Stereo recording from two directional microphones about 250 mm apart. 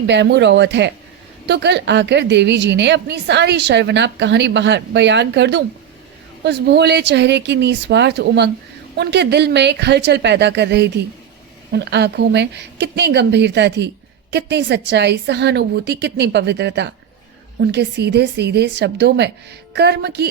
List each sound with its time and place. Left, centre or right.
0.1 s speech: right